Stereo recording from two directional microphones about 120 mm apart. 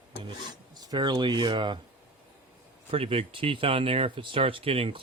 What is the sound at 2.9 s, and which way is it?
Speech, 50° right (ahead or behind).